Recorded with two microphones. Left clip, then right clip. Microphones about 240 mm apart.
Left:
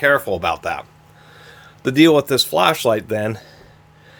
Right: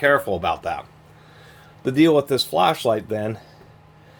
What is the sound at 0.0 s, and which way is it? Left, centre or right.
Speech, left.